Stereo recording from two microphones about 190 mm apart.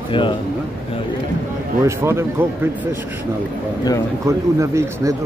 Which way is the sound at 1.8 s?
15° right (ahead or behind).